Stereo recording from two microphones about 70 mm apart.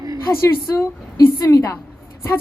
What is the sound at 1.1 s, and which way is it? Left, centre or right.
Speech, left.